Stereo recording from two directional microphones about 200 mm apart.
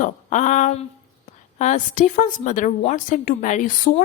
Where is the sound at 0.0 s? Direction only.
35° left (ahead or behind).